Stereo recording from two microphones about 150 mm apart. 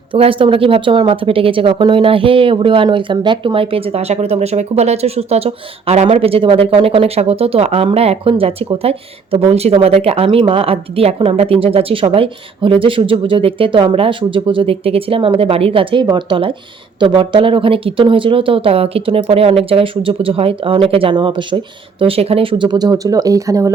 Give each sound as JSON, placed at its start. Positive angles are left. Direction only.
{"t": 0.1, "sound": "speech", "side_deg": -35}